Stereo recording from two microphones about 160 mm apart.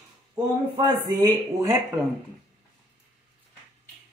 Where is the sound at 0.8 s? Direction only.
20° right (ahead or behind).